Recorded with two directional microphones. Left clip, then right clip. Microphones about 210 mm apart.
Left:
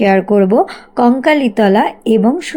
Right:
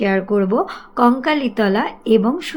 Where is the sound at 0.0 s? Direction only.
25° left (ahead or behind).